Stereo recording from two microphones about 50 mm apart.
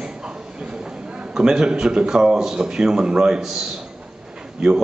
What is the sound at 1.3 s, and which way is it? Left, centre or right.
A man's voice, centre.